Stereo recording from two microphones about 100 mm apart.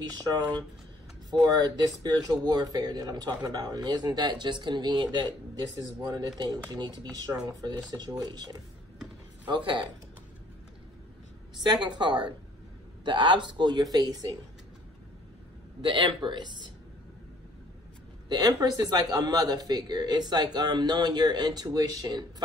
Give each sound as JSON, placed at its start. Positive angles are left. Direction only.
{"t": 0.2, "sound": "speech", "side_deg": -45}
{"t": 11.6, "sound": "speech", "side_deg": -45}
{"t": 15.8, "sound": "speech", "side_deg": -55}
{"t": 18.5, "sound": "speech", "side_deg": -40}